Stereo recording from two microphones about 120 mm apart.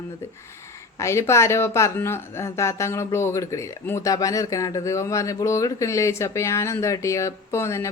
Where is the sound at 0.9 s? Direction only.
25° left (ahead or behind).